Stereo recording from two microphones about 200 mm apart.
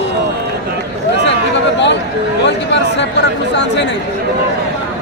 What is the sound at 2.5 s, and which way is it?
Speech, 60° left (ahead or behind).